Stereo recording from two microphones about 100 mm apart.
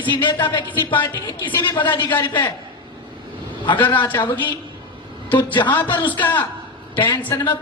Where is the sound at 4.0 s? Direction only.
50° left (ahead or behind).